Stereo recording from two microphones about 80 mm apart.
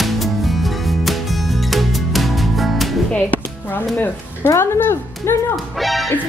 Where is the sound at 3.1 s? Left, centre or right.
Left.